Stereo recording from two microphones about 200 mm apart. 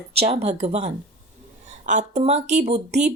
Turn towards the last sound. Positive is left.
turn(degrees=-35)  # may be behind; listen again after turning